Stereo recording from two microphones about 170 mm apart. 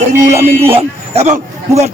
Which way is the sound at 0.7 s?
40° right (ahead or behind).